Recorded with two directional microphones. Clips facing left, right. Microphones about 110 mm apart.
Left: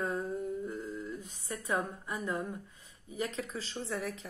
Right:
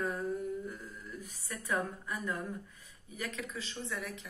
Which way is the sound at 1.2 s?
25° left (ahead or behind).